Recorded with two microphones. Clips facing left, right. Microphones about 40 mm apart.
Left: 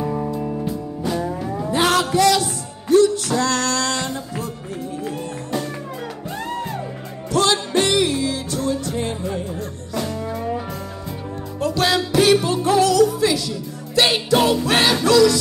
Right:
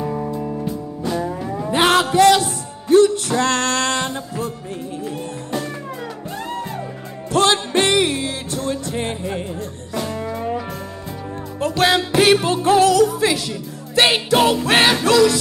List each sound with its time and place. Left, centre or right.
0.0 s music: centre
1.7 s music: right
7.3 s music: right
9.9 s music: centre
11.6 s music: right